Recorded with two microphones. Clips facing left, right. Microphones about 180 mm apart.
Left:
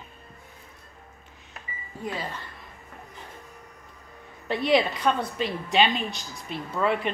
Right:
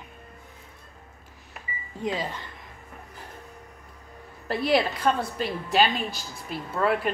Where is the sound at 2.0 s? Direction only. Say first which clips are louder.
Right 4 dB; 15° right (ahead or behind).